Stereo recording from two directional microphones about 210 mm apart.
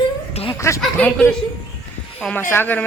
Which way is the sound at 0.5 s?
15° left (ahead or behind).